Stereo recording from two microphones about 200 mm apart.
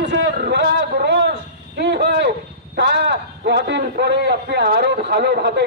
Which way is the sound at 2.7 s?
55° right (ahead or behind).